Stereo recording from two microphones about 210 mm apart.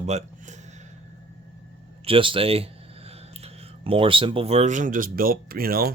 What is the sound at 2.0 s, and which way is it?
Speech, 25° right (ahead or behind).